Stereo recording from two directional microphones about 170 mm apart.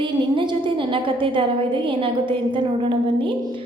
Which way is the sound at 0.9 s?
30° right (ahead or behind).